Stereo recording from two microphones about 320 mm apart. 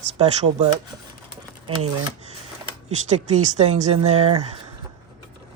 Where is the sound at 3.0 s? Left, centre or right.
Right.